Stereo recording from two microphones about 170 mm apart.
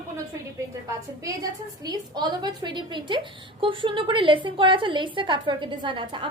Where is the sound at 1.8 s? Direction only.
25° right (ahead or behind).